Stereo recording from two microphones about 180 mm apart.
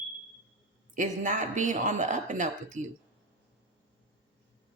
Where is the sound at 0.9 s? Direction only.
45° right (ahead or behind).